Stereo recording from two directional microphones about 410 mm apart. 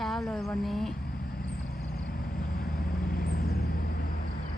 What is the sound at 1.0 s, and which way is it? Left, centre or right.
Vehicle, left.